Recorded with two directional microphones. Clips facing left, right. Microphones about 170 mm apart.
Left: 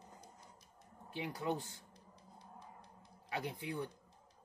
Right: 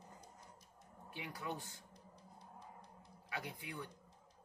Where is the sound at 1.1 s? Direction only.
30° left (ahead or behind).